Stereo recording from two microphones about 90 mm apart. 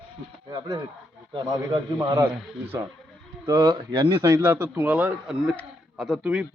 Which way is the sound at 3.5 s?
50° right (ahead or behind).